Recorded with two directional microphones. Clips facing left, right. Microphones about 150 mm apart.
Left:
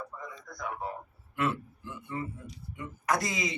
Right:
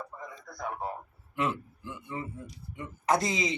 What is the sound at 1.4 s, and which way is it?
Speech, 15° right (ahead or behind).